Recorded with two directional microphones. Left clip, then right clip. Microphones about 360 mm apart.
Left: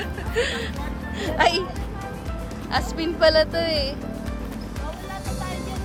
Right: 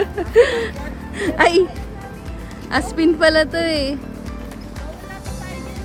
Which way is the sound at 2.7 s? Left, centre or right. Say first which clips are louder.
Right 8 dB; right.